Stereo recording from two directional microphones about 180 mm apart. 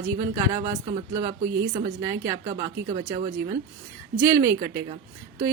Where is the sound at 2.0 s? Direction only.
15° right (ahead or behind).